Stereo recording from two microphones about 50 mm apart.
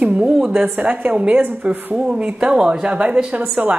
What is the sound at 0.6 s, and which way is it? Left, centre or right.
A woman's voice, right.